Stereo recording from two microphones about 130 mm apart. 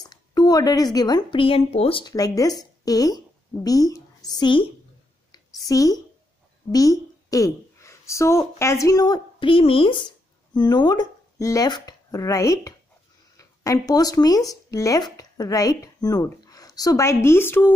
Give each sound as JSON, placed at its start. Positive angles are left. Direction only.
{"t": 0.0, "sound": "a woman's voice", "side_deg": 30}
{"t": 2.1, "sound": "a woman's voice", "side_deg": 30}
{"t": 5.3, "sound": "a sound", "side_deg": 25}
{"t": 6.7, "sound": "a woman's voice", "side_deg": 25}